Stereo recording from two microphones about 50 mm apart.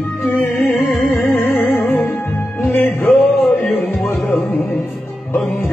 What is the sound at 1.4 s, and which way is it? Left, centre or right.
Music, left.